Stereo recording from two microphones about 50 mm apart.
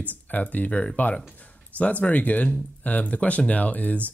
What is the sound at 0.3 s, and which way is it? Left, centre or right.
Speech, left.